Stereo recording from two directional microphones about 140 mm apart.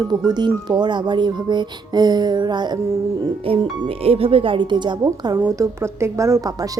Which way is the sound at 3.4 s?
40° right (ahead or behind).